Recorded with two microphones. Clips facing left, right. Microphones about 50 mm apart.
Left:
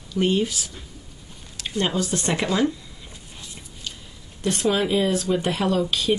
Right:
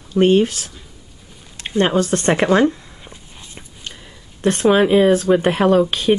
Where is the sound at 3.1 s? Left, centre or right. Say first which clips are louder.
Right 2 dB; right.